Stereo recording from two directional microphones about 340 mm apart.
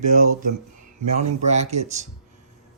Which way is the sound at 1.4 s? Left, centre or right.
Centre.